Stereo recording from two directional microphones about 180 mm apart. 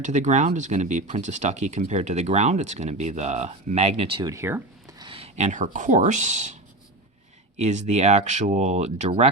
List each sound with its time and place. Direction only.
0.0 s speech: 40° right (ahead or behind)
4.3 s speech: 15° right (ahead or behind)
5.0 s speech: 35° right (ahead or behind)
7.6 s speech: 40° right (ahead or behind)